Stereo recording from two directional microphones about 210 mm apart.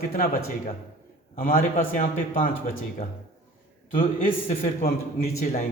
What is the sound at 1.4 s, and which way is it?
A man's voice, 45° left (ahead or behind).